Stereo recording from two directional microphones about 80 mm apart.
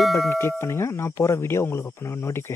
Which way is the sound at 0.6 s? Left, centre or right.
Left.